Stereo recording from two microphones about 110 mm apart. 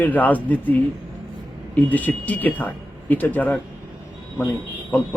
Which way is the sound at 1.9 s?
15° left (ahead or behind).